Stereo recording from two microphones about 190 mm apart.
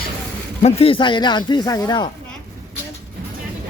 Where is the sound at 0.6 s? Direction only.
30° left (ahead or behind).